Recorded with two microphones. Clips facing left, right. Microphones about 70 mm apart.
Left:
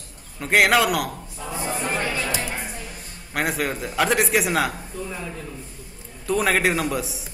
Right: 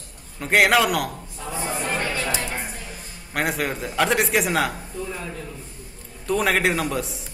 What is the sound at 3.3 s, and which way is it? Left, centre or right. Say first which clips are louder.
A man's voice: even; centre.